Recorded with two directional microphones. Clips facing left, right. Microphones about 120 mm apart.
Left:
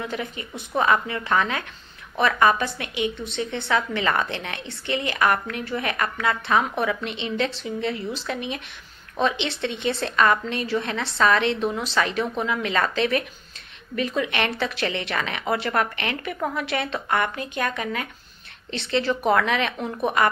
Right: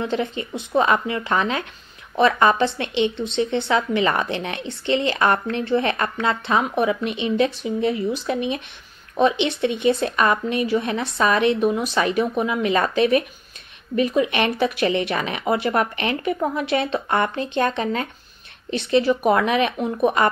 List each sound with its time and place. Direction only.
0.0 s a woman's voice: 25° right (ahead or behind)
18.7 s a woman's voice: 15° right (ahead or behind)